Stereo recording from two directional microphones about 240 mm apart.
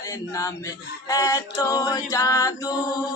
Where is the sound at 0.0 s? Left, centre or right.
Centre.